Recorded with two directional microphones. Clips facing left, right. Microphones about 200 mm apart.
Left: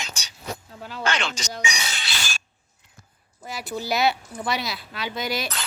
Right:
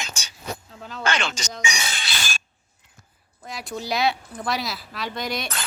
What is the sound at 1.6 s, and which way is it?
Chink, 50° right (ahead or behind).